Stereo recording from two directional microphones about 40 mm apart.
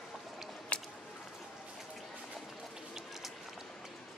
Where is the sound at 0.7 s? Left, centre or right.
Left.